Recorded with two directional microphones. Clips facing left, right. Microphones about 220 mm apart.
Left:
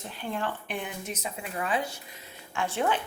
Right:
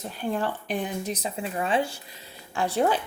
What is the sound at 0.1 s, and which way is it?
A woman's voice, 45° right (ahead or behind).